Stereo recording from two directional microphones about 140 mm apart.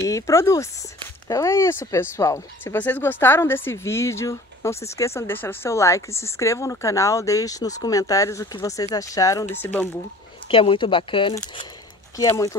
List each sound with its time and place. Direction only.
0.0 s speech: 20° left (ahead or behind)
10.5 s speech: 40° left (ahead or behind)